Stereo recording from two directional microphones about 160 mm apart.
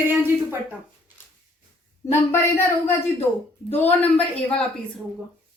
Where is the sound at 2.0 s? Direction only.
20° left (ahead or behind).